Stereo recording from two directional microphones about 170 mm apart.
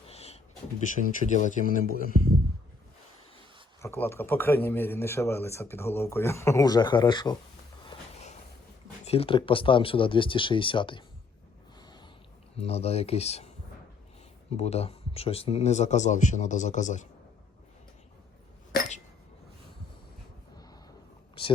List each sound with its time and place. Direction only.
0.1 s a sound: 35° left (ahead or behind)
0.9 s speech: 50° left (ahead or behind)
3.8 s speech: 15° left (ahead or behind)
7.9 s a sound: 40° left (ahead or behind)
9.0 s speech: 35° left (ahead or behind)
11.8 s snort: 25° left (ahead or behind)
12.5 s speech: 35° left (ahead or behind)
14.5 s speech: 40° left (ahead or behind)
21.4 s a sound: 30° left (ahead or behind)